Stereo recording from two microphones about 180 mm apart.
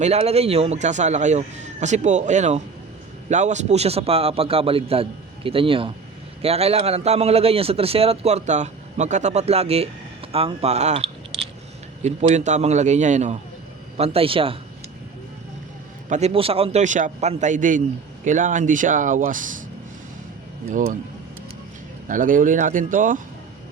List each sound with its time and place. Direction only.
0.0 s a man's voice: 35° right (ahead or behind)
16.0 s a man's voice: 40° right (ahead or behind)
20.7 s speech: 55° right (ahead or behind)
22.0 s speech: 50° right (ahead or behind)